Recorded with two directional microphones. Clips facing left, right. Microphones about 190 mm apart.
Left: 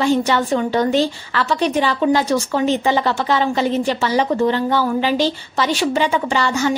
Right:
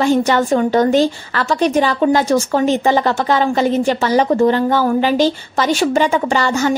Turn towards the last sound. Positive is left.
turn(degrees=-45)  # may be behind; listen again after turning